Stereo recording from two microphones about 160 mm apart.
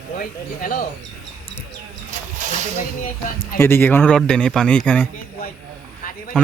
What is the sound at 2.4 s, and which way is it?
Music, 50° right (ahead or behind).